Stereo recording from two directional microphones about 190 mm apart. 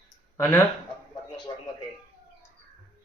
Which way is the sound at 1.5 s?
25° left (ahead or behind).